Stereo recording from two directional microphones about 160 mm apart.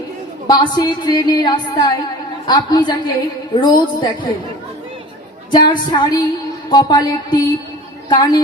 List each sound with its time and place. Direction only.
0.5 s a woman's voice: 25° left (ahead or behind)
5.5 s a woman's voice: 25° left (ahead or behind)